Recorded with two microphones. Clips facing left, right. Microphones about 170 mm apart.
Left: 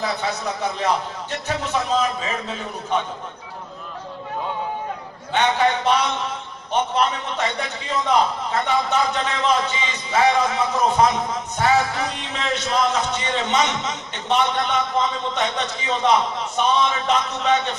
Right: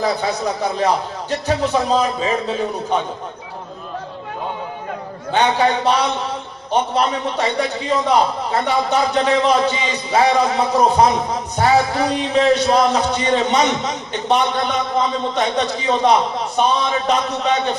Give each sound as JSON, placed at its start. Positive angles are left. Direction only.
{"t": 0.0, "sound": "a man's voice", "side_deg": -35}
{"t": 5.3, "sound": "a man's voice", "side_deg": -35}